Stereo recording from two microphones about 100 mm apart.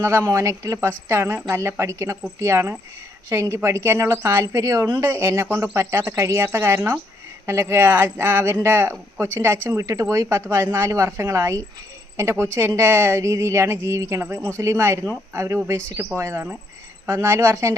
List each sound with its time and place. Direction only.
0.0 s a woman's voice: 25° right (ahead or behind)
0.3 s a woman's voice: 35° right (ahead or behind)
4.9 s a woman's voice: 25° right (ahead or behind)